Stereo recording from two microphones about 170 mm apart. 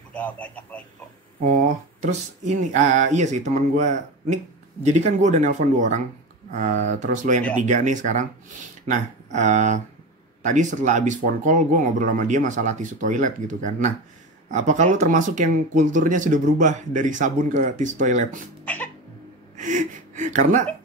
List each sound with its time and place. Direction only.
0.1 s a man's voice: 10° left (ahead or behind)
1.4 s speech: 50° right (ahead or behind)
19.5 s gasp: 45° right (ahead or behind)